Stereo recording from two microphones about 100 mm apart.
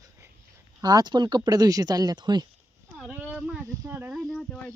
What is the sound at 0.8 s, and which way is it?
Speech, 40° right (ahead or behind).